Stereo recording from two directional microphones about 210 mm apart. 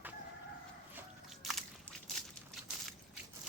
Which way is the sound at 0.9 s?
Centre (ahead or behind).